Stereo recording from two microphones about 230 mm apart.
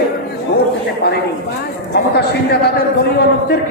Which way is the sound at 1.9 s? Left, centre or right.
Left.